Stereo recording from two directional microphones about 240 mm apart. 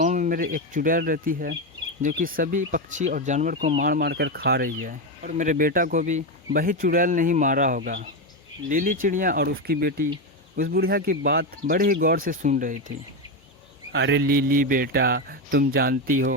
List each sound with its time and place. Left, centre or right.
0.0 s speech: right
13.9 s speech: right